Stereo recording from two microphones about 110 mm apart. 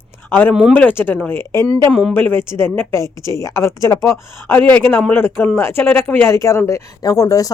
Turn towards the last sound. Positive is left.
turn(degrees=30)  # may be behind; listen again after turning